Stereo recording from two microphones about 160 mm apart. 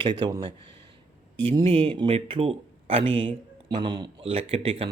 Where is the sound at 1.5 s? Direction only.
35° right (ahead or behind).